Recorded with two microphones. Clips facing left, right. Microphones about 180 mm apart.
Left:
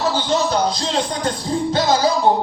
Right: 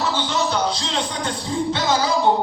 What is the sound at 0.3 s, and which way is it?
Speech, 40° left (ahead or behind).